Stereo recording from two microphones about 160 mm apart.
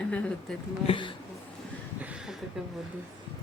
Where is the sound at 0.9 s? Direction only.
30° left (ahead or behind).